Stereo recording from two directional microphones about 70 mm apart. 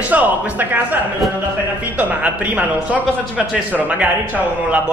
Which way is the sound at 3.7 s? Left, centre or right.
Right.